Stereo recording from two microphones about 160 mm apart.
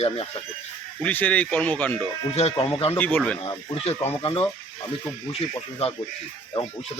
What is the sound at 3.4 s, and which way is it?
Speech, 30° left (ahead or behind).